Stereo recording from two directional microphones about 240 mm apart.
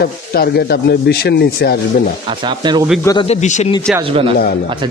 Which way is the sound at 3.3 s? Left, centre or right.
Left.